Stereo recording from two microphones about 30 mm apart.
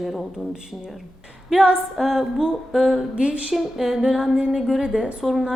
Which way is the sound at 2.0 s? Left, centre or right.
Centre.